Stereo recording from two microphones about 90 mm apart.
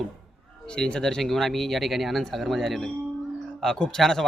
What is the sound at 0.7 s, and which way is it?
Speech, 10° left (ahead or behind).